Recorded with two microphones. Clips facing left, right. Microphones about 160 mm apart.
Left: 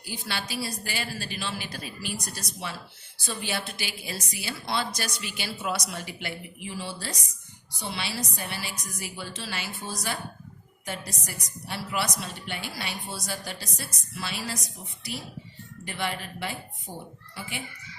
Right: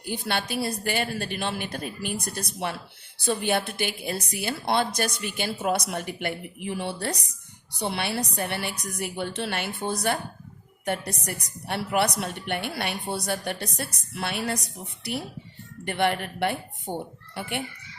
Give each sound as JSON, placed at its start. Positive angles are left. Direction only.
{"t": 0.0, "sound": "a woman's voice", "side_deg": -55}